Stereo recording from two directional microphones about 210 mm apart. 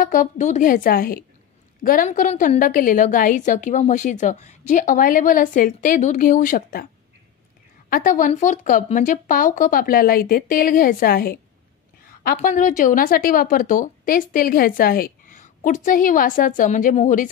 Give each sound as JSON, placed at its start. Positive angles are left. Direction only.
{"t": 0.0, "sound": "a woman's voice", "side_deg": 40}
{"t": 7.9, "sound": "a woman's voice", "side_deg": 40}